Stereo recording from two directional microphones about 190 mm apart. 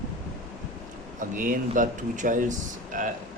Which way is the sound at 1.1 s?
45° right (ahead or behind).